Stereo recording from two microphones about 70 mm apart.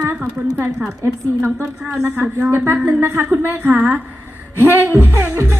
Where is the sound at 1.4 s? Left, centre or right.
Right.